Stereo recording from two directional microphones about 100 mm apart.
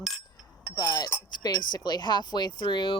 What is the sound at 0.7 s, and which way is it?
Speech, 40° left (ahead or behind).